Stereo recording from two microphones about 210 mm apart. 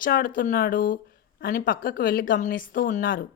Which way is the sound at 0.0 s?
40° left (ahead or behind).